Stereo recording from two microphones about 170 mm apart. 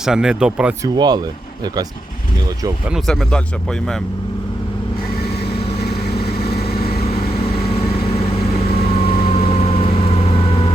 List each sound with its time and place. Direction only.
0.0 s speech: 5° right (ahead or behind)
0.9 s speech: 25° right (ahead or behind)
2.9 s speech: centre (ahead or behind)
5.4 s vehicle: 70° left (ahead or behind)
7.0 s vehicle: 35° left (ahead or behind)